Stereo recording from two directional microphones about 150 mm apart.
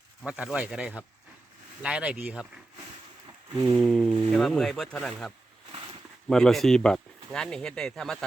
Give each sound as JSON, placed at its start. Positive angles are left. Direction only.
{"t": 0.3, "sound": "speech", "side_deg": -5}
{"t": 3.5, "sound": "a sound", "side_deg": -20}
{"t": 3.8, "sound": "speech", "side_deg": 0}